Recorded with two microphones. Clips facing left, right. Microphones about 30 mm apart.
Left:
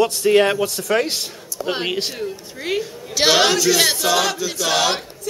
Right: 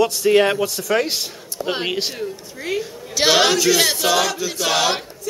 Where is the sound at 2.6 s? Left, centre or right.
Centre.